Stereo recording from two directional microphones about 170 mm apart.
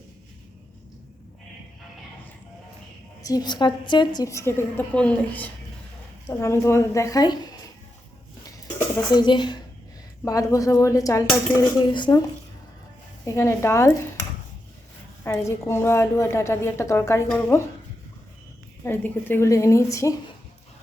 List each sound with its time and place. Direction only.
3.2 s a woman's voice: 20° left (ahead or behind)
9.1 s a woman's voice: 25° left (ahead or behind)
13.2 s a woman's voice: 15° left (ahead or behind)
15.2 s a woman's voice: 15° left (ahead or behind)
18.9 s a woman's voice: 10° left (ahead or behind)